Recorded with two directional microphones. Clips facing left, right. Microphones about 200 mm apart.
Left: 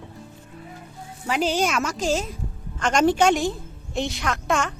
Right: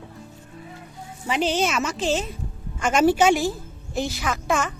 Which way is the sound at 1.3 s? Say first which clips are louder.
Even; 10° left (ahead or behind).